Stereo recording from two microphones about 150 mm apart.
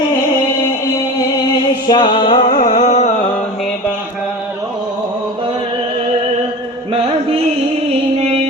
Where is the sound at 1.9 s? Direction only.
30° left (ahead or behind).